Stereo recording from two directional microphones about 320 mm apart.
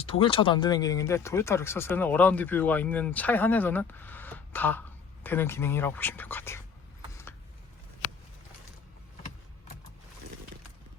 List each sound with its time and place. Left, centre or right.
0.0 s speech: centre